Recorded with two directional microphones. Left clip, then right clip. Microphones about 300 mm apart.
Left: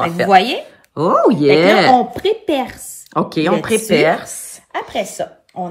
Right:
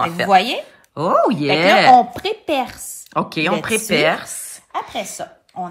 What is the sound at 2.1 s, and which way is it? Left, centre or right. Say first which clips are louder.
Speech: left 3 dB; right.